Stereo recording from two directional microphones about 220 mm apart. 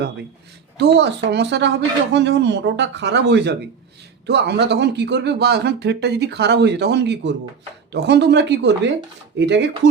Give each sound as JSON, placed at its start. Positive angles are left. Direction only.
{"t": 0.8, "sound": "speech", "side_deg": -50}